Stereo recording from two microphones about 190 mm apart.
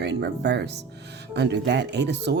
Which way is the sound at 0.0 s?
60° right (ahead or behind).